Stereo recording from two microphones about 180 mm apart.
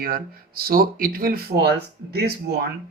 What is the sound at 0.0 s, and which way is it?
Speech, 55° right (ahead or behind).